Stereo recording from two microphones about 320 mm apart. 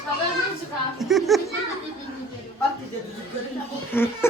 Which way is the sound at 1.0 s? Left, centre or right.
Centre.